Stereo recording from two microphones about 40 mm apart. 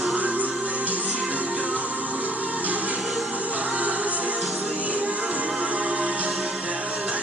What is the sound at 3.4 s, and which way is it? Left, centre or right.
Music, right.